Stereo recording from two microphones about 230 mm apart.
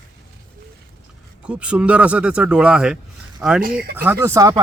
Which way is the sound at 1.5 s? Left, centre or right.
Centre.